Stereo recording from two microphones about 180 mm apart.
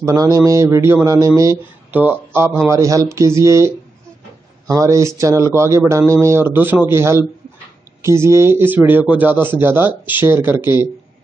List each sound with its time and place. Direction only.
0.0 s a man's voice: 20° right (ahead or behind)